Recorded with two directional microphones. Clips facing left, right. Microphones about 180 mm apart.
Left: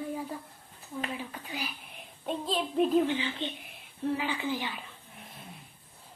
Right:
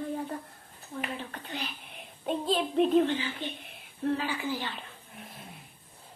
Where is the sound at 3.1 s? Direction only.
20° left (ahead or behind).